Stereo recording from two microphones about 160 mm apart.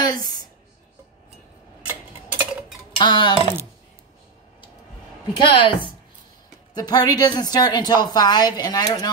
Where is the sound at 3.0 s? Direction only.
30° left (ahead or behind).